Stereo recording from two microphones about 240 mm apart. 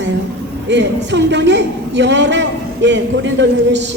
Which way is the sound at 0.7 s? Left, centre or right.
Right.